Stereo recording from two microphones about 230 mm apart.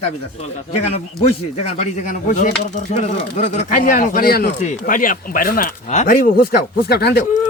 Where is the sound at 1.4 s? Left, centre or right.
Left.